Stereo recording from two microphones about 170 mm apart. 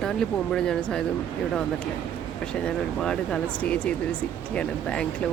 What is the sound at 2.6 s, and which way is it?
Speech, 5° left (ahead or behind).